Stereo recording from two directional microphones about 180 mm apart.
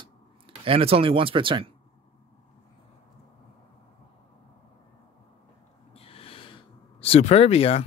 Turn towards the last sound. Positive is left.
turn(degrees=35)  # may be behind; listen again after turning